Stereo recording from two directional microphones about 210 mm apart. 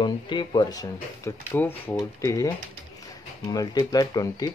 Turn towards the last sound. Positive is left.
turn(degrees=20)  # may be behind; listen again after turning